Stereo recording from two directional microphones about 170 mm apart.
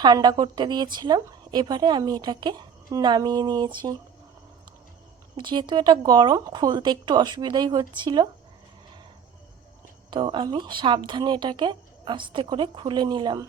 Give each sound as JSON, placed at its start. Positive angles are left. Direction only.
{"t": 0.0, "sound": "a woman's voice", "side_deg": -25}
{"t": 5.4, "sound": "a woman's voice", "side_deg": -25}
{"t": 10.1, "sound": "a woman's voice", "side_deg": -30}